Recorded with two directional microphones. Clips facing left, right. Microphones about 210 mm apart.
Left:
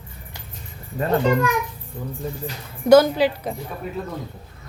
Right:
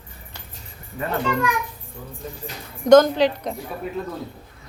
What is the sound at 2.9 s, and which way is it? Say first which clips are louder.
Speech: even; 5° left (ahead or behind).